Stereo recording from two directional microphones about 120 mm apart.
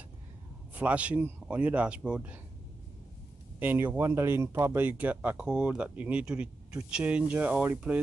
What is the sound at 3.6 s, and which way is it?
Speech, 15° right (ahead or behind).